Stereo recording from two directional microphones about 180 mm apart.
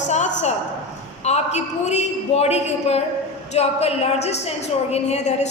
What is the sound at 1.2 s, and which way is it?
A man's voice, 40° left (ahead or behind).